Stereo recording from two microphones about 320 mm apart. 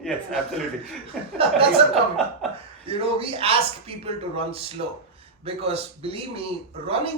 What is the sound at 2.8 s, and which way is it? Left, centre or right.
A man's voice, centre.